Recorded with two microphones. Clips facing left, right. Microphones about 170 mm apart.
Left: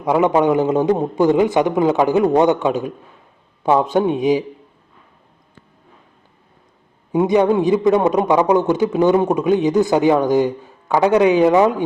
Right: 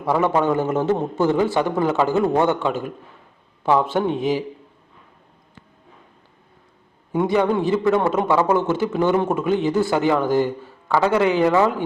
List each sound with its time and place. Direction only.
0.0 s a man's voice: 15° left (ahead or behind)
7.1 s a man's voice: 20° left (ahead or behind)